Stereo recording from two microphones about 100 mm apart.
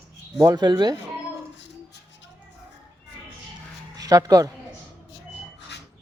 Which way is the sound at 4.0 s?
40° right (ahead or behind).